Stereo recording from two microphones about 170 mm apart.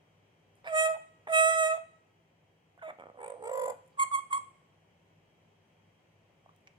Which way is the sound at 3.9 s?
30° right (ahead or behind).